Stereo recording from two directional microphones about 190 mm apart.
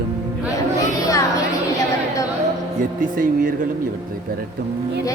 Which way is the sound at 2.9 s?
45° right (ahead or behind).